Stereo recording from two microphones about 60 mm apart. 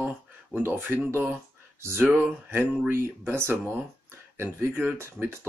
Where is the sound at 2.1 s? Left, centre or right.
Right.